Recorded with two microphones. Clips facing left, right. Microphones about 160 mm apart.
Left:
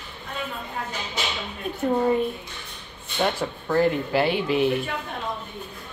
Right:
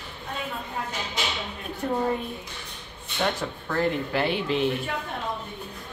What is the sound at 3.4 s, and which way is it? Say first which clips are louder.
A woman's voice: left 5 dB; 20° left (ahead or behind).